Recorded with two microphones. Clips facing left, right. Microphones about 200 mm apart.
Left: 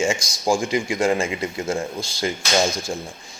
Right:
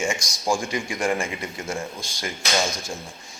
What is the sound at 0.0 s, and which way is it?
A man's voice, 25° left (ahead or behind).